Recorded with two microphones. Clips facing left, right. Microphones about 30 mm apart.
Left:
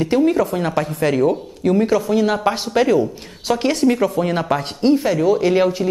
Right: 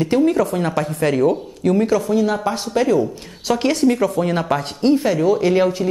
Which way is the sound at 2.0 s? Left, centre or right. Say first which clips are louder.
Left 1 dB; left.